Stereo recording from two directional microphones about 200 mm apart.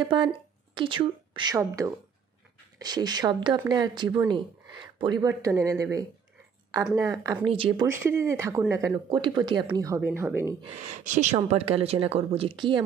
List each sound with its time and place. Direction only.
0.1 s speech: 25° right (ahead or behind)
7.8 s speech: 15° right (ahead or behind)
10.8 s speech: 35° right (ahead or behind)